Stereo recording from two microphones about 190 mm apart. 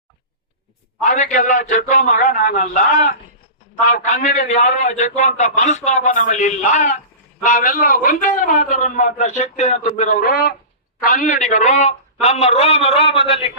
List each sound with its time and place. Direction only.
1.0 s a man's voice: 40° left (ahead or behind)